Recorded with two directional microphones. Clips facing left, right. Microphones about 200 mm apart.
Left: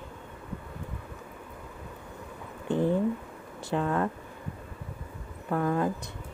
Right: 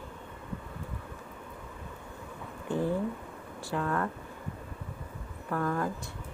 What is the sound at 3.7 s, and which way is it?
Speech, 20° left (ahead or behind).